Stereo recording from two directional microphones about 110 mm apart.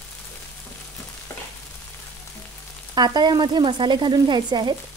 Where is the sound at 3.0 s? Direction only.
40° right (ahead or behind).